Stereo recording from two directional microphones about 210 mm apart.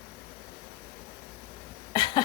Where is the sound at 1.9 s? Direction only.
20° left (ahead or behind).